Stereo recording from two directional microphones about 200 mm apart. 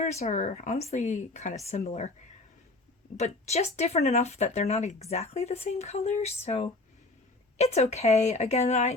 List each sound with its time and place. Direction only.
0.0 s speech: 35° left (ahead or behind)
3.2 s speech: 35° left (ahead or behind)